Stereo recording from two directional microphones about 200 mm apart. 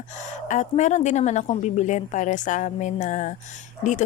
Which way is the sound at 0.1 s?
35° left (ahead or behind).